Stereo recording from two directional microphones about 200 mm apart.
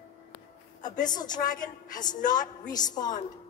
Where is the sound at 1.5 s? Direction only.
40° left (ahead or behind).